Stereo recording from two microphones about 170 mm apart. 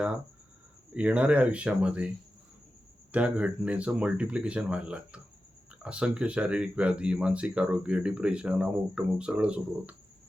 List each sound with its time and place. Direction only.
0.9 s speech: 10° right (ahead or behind)
3.1 s speech: 5° right (ahead or behind)